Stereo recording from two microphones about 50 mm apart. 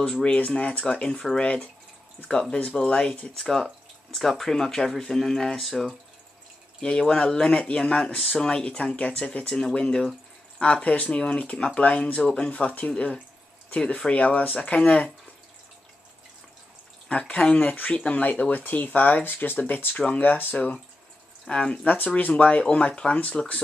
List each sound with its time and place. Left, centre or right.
0.0 s speech: left
3.3 s speech: centre
6.8 s speech: centre
9.5 s speech: centre
9.8 s speech: centre
12.2 s speech: centre
17.1 s speech: left
20.5 s speech: left
21.8 s speech: left
22.1 s speech: left